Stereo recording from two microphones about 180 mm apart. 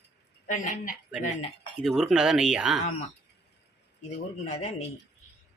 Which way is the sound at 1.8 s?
Centre (ahead or behind).